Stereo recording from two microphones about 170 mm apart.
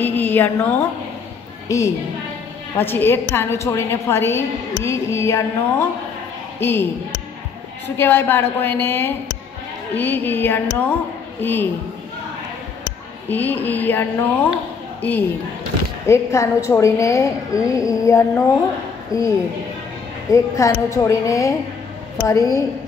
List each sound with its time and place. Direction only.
0.0 s a sound: 10° left (ahead or behind)
1.7 s a woman's voice: 20° left (ahead or behind)
13.3 s a woman's voice: 10° left (ahead or behind)